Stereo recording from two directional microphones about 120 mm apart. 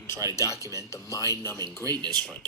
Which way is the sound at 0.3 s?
25° left (ahead or behind).